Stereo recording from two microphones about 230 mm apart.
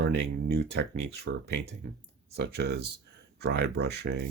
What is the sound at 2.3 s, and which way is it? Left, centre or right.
Speech, right.